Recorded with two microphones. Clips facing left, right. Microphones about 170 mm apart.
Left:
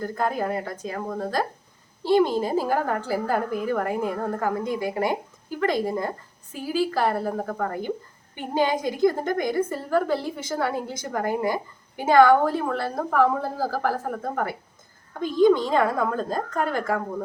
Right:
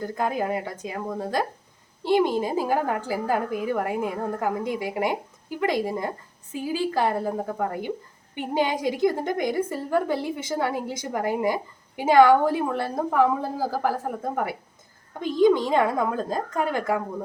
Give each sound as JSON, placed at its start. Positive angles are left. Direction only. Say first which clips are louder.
{"t": 0.0, "sound": "a woman's voice", "louder": "even", "side_deg": -15}